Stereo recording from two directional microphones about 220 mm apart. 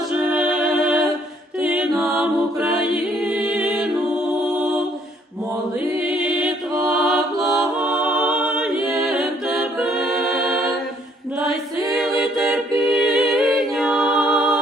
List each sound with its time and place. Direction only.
0.3 s music: centre (ahead or behind)
2.0 s mantra: centre (ahead or behind)
2.9 s music: 5° right (ahead or behind)
6.1 s mantra: centre (ahead or behind)
7.3 s music: 15° right (ahead or behind)
7.8 s a capella: 5° right (ahead or behind)
11.3 s choir: centre (ahead or behind)
12.4 s a capella: centre (ahead or behind)